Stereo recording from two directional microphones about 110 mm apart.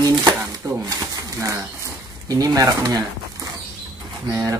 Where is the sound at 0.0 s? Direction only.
40° right (ahead or behind).